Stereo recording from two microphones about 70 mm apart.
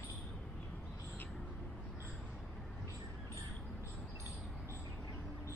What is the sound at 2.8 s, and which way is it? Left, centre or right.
Vehicle, left.